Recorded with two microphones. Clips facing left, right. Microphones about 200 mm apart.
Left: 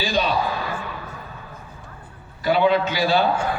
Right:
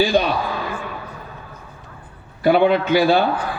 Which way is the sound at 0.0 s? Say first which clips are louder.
Right 5 dB; 55° right (ahead or behind).